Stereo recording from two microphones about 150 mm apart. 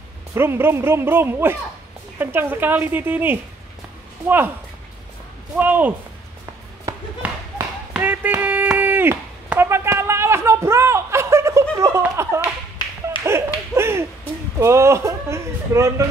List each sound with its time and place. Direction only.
0.3 s speech: 15° right (ahead or behind)
5.6 s speech: 10° right (ahead or behind)
6.9 s a sound: 20° right (ahead or behind)
13.7 s speech: 15° right (ahead or behind)